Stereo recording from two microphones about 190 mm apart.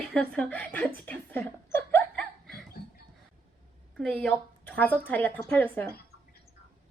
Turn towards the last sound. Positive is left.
turn(degrees=10)  # may be behind; listen again after turning